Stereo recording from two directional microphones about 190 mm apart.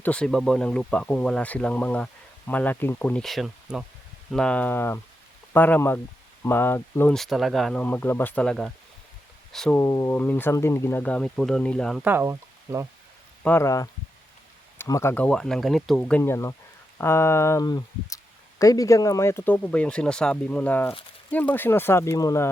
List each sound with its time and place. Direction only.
0.0 s speech: 5° left (ahead or behind)
12.0 s speech: 10° right (ahead or behind)
13.4 s speech: 10° left (ahead or behind)